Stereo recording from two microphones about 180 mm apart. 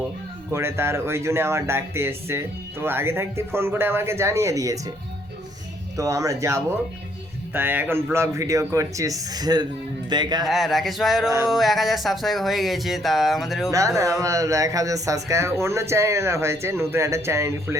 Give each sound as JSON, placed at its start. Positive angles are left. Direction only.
{"t": 0.5, "sound": "speech", "side_deg": -15}
{"t": 6.0, "sound": "speech", "side_deg": -20}
{"t": 10.4, "sound": "speech", "side_deg": 0}
{"t": 13.7, "sound": "speech", "side_deg": -20}